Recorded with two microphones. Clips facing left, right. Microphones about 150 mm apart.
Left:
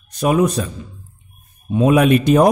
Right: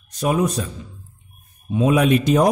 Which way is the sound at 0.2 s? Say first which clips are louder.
Left 4 dB; 70° left (ahead or behind).